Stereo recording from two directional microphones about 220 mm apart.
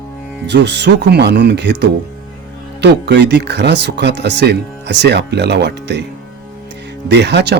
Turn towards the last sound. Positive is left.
turn(degrees=-50)  # may be behind; listen again after turning